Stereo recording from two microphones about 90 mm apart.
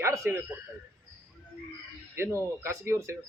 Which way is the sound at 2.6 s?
30° right (ahead or behind).